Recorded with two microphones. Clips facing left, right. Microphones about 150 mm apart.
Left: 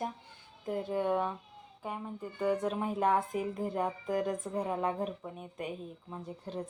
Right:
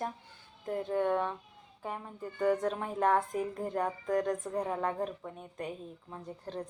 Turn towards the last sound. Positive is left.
turn(degrees=15)  # may be behind; listen again after turning